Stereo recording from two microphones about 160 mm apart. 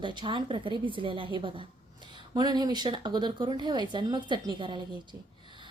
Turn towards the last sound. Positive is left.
turn(degrees=-30)  # may be behind; listen again after turning